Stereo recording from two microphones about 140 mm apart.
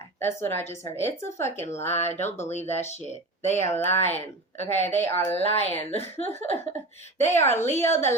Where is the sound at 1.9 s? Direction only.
50° left (ahead or behind).